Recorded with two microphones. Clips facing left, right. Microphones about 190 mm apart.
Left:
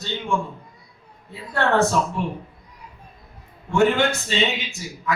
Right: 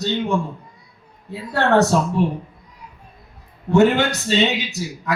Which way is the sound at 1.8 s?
40° right (ahead or behind).